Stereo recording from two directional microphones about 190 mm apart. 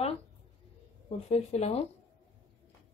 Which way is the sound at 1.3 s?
35° left (ahead or behind).